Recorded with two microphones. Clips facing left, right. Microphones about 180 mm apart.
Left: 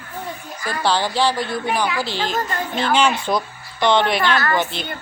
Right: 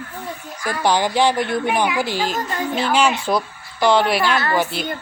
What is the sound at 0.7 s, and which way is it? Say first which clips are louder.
A woman's voice: right 2 dB; 15° right (ahead or behind).